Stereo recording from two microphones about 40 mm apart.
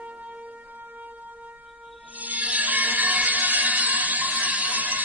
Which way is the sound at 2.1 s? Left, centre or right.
Right.